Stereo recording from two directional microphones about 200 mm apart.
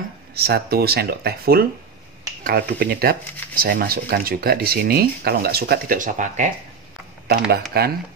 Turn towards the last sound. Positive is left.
turn(degrees=-50)  # may be behind; listen again after turning